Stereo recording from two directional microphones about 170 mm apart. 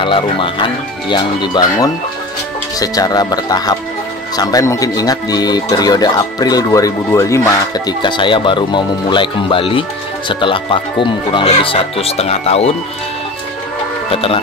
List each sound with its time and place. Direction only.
0.0 s speech: 30° left (ahead or behind)
14.1 s speech: 35° left (ahead or behind)